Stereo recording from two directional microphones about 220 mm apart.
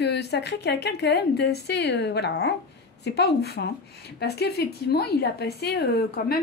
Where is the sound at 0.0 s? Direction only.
50° left (ahead or behind).